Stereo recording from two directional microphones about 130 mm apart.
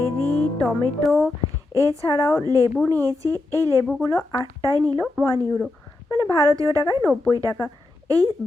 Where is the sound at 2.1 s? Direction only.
25° left (ahead or behind).